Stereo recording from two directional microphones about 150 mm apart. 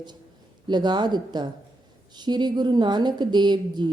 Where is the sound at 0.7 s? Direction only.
30° right (ahead or behind).